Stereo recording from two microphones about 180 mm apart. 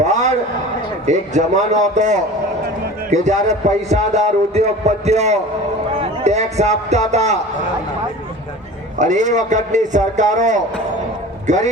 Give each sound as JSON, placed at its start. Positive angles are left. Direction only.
{"t": 0.0, "sound": "a sound", "side_deg": -40}
{"t": 1.0, "sound": "a man's voice", "side_deg": -40}
{"t": 9.0, "sound": "a man's voice", "side_deg": -40}